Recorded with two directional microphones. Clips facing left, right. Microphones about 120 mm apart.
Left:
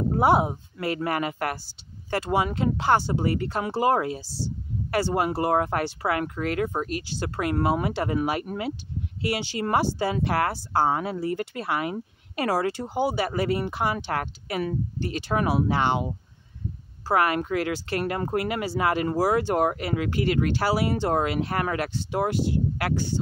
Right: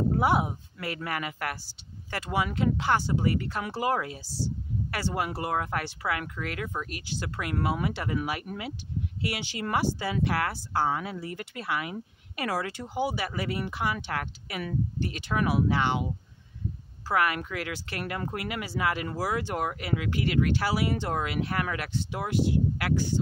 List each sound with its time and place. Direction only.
0.1 s speech: 30° left (ahead or behind)
17.1 s speech: 35° left (ahead or behind)